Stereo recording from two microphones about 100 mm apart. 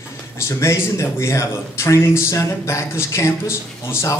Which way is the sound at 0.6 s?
30° left (ahead or behind).